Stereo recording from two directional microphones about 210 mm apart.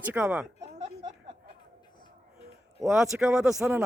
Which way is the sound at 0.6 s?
30° right (ahead or behind).